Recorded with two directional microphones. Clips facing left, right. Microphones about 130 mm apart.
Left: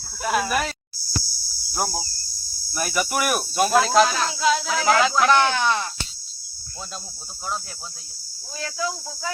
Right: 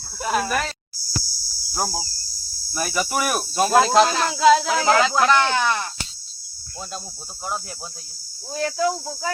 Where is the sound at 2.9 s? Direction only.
5° left (ahead or behind).